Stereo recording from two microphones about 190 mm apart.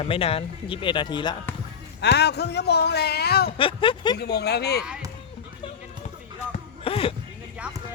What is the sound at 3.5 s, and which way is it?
Speech, 25° left (ahead or behind).